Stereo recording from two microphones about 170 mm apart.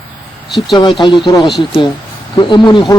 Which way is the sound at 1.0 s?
30° left (ahead or behind).